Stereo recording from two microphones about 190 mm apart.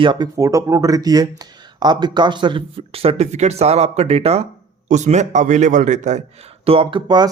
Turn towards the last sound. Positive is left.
turn(degrees=-25)  # may be behind; listen again after turning